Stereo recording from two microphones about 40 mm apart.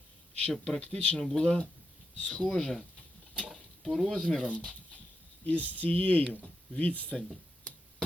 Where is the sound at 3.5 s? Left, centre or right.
Centre.